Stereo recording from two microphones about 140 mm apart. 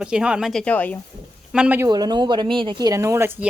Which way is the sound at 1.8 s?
30° right (ahead or behind).